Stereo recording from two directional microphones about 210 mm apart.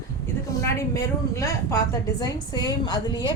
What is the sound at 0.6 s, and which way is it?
A woman's voice, 15° left (ahead or behind).